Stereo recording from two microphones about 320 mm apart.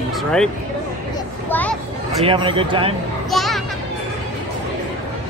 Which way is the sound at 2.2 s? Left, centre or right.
Centre.